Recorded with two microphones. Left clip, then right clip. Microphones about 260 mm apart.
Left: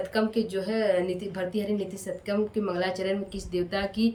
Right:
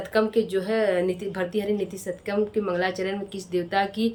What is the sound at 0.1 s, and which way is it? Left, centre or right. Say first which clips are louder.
A woman's voice: right 9 dB; centre.